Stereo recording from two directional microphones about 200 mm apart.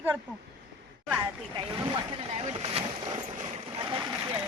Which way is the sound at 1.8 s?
30° right (ahead or behind).